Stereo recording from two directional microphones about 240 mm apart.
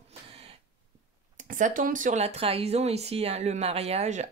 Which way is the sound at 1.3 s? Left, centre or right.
Right.